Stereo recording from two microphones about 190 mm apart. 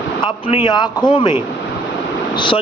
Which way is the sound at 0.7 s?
20° left (ahead or behind).